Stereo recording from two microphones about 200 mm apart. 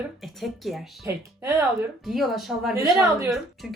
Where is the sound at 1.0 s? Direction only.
10° right (ahead or behind).